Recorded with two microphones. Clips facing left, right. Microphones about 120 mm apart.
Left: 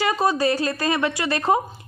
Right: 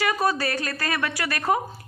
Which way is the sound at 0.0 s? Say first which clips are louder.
Left 3 dB; 25° left (ahead or behind).